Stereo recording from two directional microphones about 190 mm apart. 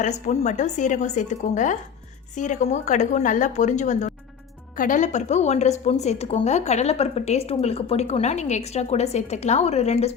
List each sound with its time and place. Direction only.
0.0 s a woman's voice: 40° left (ahead or behind)